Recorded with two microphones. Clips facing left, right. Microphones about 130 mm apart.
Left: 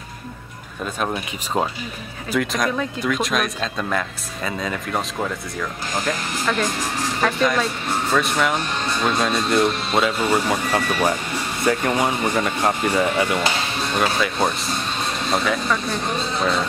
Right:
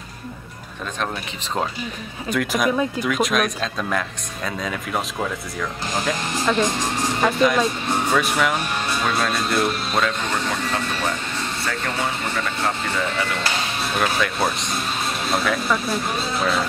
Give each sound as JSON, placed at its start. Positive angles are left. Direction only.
{"t": 1.0, "sound": "speech", "side_deg": 10}
{"t": 2.3, "sound": "speech", "side_deg": -5}
{"t": 6.4, "sound": "speech", "side_deg": -20}
{"t": 13.9, "sound": "speech", "side_deg": 0}